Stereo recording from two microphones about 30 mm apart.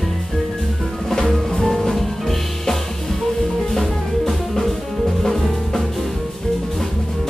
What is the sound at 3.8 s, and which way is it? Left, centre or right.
Music, centre.